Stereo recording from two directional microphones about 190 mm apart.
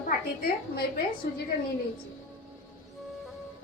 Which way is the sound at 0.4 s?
55° left (ahead or behind).